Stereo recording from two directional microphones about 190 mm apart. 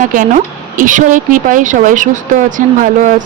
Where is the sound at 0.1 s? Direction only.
45° right (ahead or behind).